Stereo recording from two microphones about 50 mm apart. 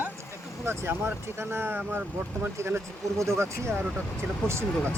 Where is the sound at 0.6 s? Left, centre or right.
Right.